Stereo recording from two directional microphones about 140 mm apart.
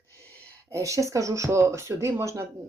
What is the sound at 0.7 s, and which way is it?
Speech, 20° right (ahead or behind).